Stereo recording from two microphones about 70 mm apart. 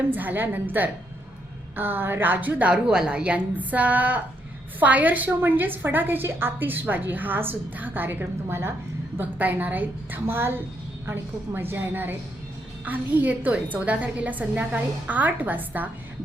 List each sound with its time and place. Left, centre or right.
0.1 s a woman's voice: right